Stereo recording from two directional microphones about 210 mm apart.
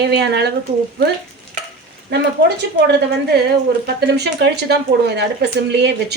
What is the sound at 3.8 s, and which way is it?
Speech, 50° right (ahead or behind).